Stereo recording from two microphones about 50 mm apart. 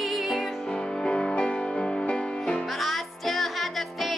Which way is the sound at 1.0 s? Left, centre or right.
Centre.